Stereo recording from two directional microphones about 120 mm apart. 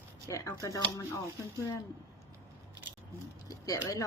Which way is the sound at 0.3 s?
25° left (ahead or behind).